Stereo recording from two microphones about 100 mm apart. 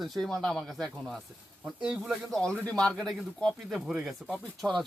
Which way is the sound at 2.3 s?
10° left (ahead or behind).